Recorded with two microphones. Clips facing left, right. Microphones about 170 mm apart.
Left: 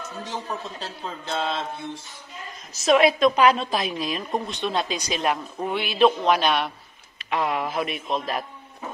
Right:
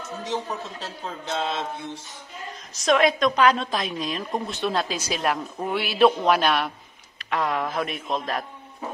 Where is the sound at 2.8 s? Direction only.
5° left (ahead or behind).